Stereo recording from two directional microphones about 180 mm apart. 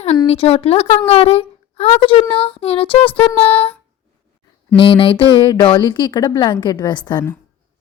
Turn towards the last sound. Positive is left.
turn(degrees=25)  # may be behind; listen again after turning